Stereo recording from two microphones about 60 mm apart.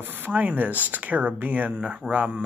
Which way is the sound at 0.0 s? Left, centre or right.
Right.